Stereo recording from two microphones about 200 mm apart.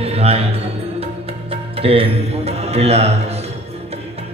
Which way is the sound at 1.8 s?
30° right (ahead or behind).